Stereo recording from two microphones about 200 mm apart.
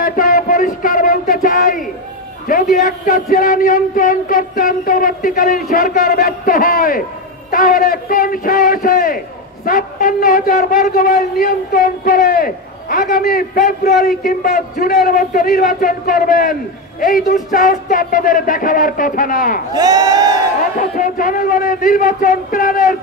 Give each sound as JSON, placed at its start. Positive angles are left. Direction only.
{"t": 0.0, "sound": "a sound", "side_deg": 45}
{"t": 2.4, "sound": "a man's voice", "side_deg": 45}
{"t": 19.7, "sound": "speech", "side_deg": -20}
{"t": 20.9, "sound": "a man's voice", "side_deg": 45}